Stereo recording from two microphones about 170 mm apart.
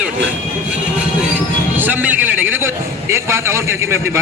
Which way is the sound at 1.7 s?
10° right (ahead or behind).